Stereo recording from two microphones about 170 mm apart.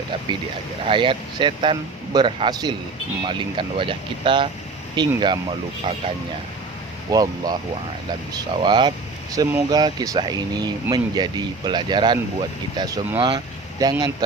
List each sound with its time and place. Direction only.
0.9 s speech: 30° right (ahead or behind)
7.1 s speech: 20° right (ahead or behind)
13.1 s vehicle: 30° right (ahead or behind)